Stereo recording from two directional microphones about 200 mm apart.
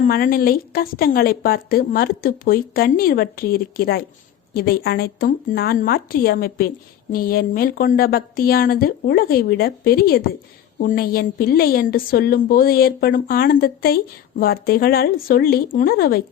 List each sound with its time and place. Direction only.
0.0 s a woman's voice: 45° left (ahead or behind)